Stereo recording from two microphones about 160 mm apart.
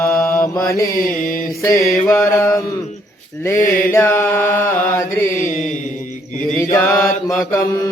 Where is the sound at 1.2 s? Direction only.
60° left (ahead or behind).